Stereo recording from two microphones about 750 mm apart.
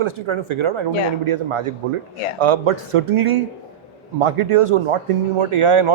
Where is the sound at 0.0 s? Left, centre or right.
Right.